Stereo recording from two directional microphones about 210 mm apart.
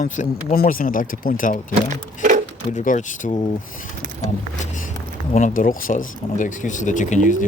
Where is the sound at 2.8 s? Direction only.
35° left (ahead or behind).